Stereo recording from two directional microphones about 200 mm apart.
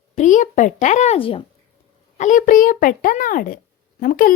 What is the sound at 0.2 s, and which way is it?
Speech, 35° left (ahead or behind).